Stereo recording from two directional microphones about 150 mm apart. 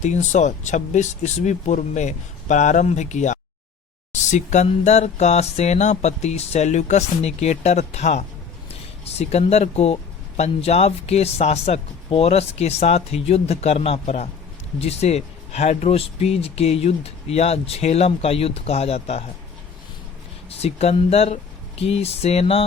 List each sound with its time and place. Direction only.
0.0 s speech: 50° left (ahead or behind)
20.6 s speech: 45° left (ahead or behind)